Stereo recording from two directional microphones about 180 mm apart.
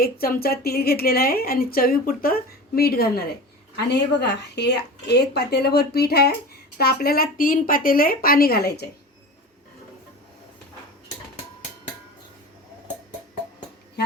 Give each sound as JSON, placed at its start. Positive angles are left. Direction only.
{"t": 0.0, "sound": "a woman's voice", "side_deg": 55}
{"t": 3.8, "sound": "a woman's voice", "side_deg": 70}